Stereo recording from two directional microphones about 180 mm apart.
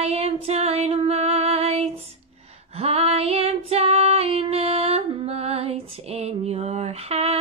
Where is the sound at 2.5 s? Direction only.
35° right (ahead or behind).